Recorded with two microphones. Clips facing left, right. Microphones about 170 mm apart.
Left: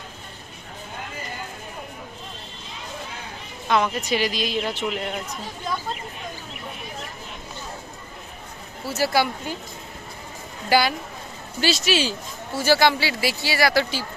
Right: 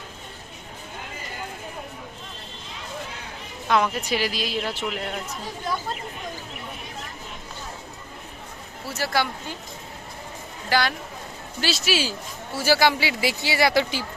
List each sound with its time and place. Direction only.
3.7 s speech: 5° right (ahead or behind)
8.9 s speech: 5° left (ahead or behind)
10.7 s speech: 5° left (ahead or behind)
11.6 s speech: 5° right (ahead or behind); by 14.0 s 20° right (ahead or behind)